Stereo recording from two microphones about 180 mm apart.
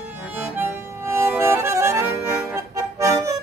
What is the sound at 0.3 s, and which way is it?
Accordion, 10° right (ahead or behind).